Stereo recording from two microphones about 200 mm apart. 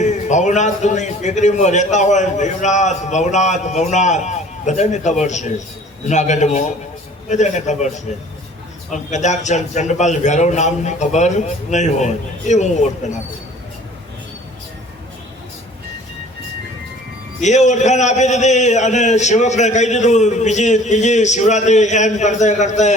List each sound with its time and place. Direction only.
0.0 s a man's voice: 35° left (ahead or behind)
17.4 s a man's voice: 35° left (ahead or behind)